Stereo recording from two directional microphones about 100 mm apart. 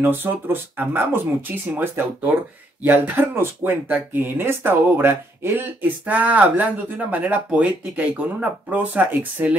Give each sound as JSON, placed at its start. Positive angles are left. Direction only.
{"t": 0.0, "sound": "speech", "side_deg": -20}